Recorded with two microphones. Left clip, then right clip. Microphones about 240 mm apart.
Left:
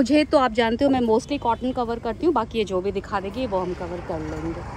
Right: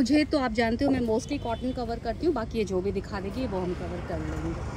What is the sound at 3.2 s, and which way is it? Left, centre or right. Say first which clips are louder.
Speech: left 6 dB; left.